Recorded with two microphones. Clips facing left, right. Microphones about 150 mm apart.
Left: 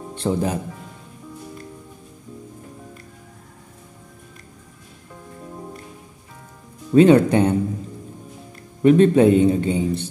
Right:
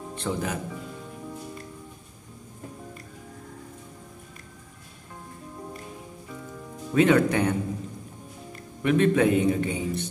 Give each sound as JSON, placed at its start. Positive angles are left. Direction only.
{"t": 0.2, "sound": "a man's voice", "side_deg": 35}
{"t": 6.9, "sound": "speech", "side_deg": 30}
{"t": 8.8, "sound": "a man's voice", "side_deg": 35}